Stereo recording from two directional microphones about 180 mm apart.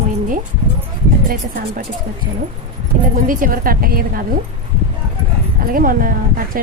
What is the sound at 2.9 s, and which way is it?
Speech, 45° right (ahead or behind).